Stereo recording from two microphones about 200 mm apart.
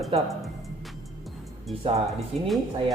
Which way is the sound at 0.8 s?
Centre (ahead or behind).